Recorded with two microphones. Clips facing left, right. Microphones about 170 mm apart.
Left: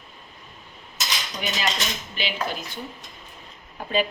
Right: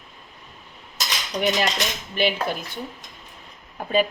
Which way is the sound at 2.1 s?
55° right (ahead or behind).